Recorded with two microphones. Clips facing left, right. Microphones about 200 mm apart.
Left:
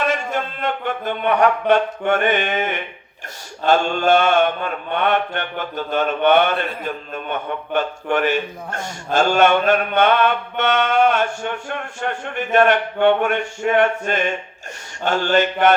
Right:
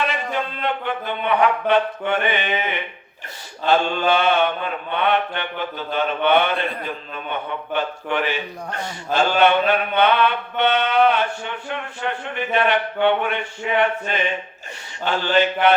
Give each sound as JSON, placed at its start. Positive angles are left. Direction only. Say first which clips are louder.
{"t": 0.0, "sound": "speech", "louder": "left 2 dB", "side_deg": 45}
{"t": 3.7, "sound": "mantra", "louder": "left 2 dB", "side_deg": 45}